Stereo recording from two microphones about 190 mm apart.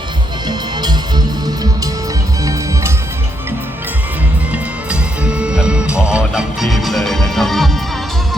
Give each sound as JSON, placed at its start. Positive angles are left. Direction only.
{"t": 0.4, "sound": "music", "side_deg": -20}
{"t": 4.5, "sound": "music", "side_deg": -5}